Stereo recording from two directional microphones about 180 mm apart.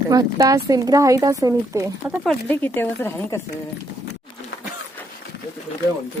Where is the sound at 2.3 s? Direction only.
10° left (ahead or behind).